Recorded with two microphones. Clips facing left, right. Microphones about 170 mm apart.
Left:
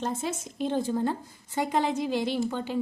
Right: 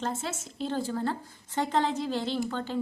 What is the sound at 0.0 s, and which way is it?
A woman's voice, 15° left (ahead or behind).